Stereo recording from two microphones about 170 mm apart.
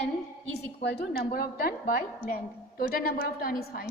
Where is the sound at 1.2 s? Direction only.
60° left (ahead or behind).